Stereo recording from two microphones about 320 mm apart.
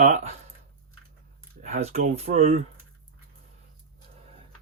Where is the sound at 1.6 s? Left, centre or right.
Right.